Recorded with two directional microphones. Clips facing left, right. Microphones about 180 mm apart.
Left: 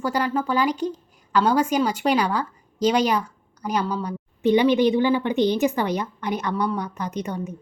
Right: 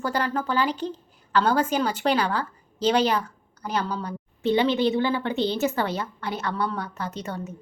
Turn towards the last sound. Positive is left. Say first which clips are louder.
# left 4 dB
turn(degrees=15)  # may be behind; listen again after turning